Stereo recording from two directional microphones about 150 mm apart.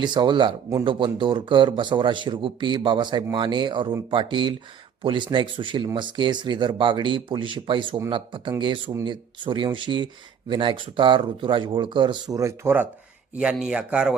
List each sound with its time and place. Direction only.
0.0 s speech: 30° right (ahead or behind)
12.4 s speech: 15° right (ahead or behind)